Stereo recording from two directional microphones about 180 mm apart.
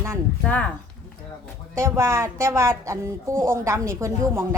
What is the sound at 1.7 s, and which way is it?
Speech, 15° right (ahead or behind).